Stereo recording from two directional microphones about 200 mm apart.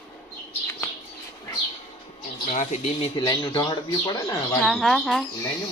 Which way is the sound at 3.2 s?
20° left (ahead or behind).